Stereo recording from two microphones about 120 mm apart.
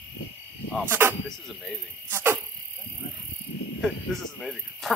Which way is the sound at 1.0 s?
15° right (ahead or behind).